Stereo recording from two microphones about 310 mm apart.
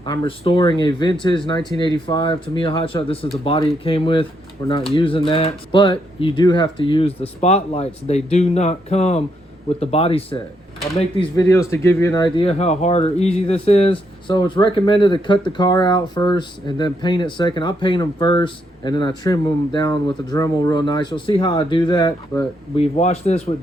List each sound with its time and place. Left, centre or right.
0.0 s speech: centre